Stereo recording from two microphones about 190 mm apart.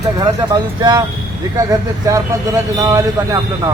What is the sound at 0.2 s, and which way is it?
Speech, 25° right (ahead or behind).